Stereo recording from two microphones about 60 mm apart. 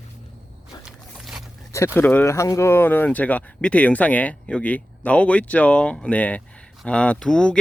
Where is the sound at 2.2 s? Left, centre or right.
Left; by 7.6 s centre.